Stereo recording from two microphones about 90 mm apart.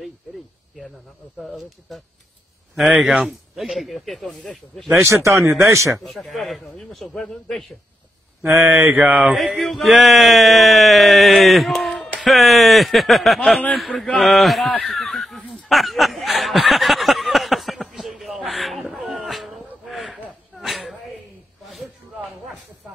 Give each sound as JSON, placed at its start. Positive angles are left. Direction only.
{"t": 1.4, "sound": "speech", "side_deg": 0}
{"t": 2.9, "sound": "speech", "side_deg": -10}
{"t": 5.0, "sound": "speech", "side_deg": -35}
{"t": 6.0, "sound": "speech", "side_deg": 0}
{"t": 8.4, "sound": "speech", "side_deg": -25}
{"t": 9.7, "sound": "speech", "side_deg": 0}
{"t": 15.5, "sound": "a sound", "side_deg": 0}
{"t": 21.6, "sound": "snake", "side_deg": 0}